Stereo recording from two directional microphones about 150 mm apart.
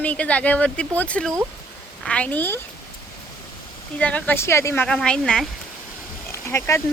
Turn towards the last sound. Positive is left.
turn(degrees=20)  # may be behind; listen again after turning